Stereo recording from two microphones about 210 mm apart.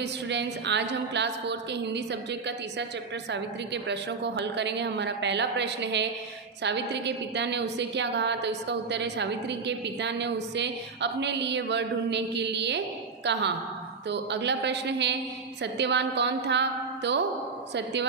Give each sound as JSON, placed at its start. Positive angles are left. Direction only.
{"t": 0.0, "sound": "a woman's voice", "side_deg": -55}